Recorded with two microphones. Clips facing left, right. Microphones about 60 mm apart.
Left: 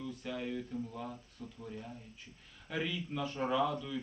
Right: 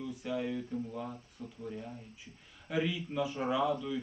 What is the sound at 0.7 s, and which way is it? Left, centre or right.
Speech, centre.